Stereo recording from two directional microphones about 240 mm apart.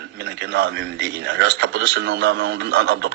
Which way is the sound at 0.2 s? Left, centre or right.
Right.